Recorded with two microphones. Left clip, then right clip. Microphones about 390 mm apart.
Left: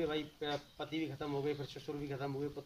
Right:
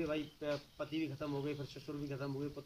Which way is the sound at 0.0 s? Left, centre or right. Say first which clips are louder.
Left 1 dB; centre.